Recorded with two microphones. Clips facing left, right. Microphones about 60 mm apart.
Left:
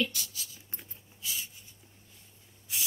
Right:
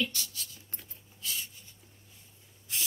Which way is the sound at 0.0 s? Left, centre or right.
Centre.